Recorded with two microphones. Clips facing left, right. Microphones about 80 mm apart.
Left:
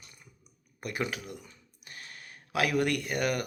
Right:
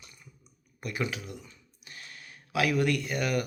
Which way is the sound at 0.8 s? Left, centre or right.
Left.